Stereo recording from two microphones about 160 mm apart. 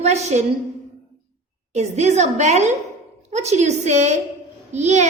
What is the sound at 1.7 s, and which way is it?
A woman's voice, 45° right (ahead or behind).